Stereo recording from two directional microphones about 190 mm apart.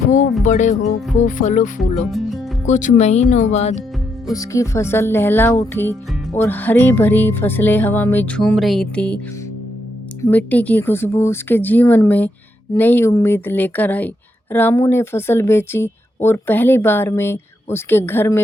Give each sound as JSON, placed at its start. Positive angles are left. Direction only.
{"t": 0.4, "sound": "speech", "side_deg": 40}
{"t": 2.0, "sound": "music", "side_deg": 0}
{"t": 2.6, "sound": "speech", "side_deg": 40}
{"t": 4.3, "sound": "speech", "side_deg": 15}
{"t": 10.2, "sound": "speech", "side_deg": 10}